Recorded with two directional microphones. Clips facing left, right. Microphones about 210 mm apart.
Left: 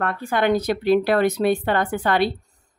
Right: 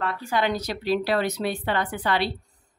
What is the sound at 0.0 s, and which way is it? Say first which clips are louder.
Speech: left 4 dB; 50° left (ahead or behind).